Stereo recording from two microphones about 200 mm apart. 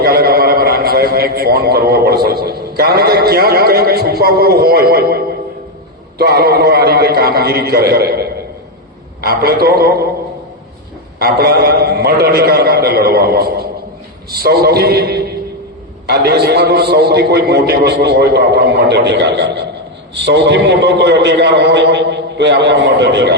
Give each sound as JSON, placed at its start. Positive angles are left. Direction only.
{"t": 0.0, "sound": "a sound", "side_deg": -50}
{"t": 6.1, "sound": "a man's voice", "side_deg": -50}
{"t": 11.2, "sound": "a man's voice", "side_deg": -50}